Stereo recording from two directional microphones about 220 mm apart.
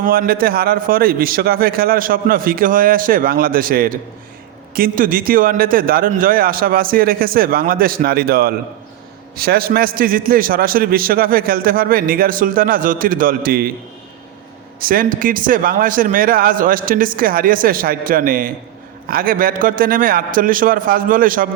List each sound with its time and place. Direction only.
0.0 s a man's voice: 40° right (ahead or behind)
14.8 s a man's voice: 40° right (ahead or behind)